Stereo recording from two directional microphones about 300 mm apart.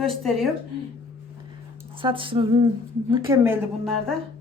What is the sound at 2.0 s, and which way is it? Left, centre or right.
A woman's voice, centre.